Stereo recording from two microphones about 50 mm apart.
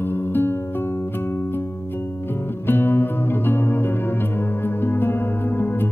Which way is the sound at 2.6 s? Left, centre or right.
Left.